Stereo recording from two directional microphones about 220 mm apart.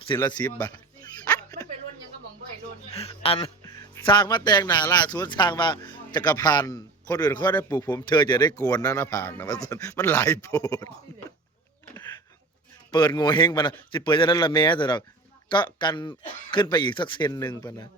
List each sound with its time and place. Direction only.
0.1 s a man's voice: 20° left (ahead or behind)
1.2 s a sound: 5° left (ahead or behind)
3.0 s music: 25° left (ahead or behind)
4.9 s a man's voice: 20° left (ahead or behind)
11.9 s a sound: 15° left (ahead or behind)
12.9 s a man's voice: 20° left (ahead or behind)